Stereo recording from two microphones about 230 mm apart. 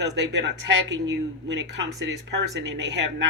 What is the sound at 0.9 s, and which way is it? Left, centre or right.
Speech, right.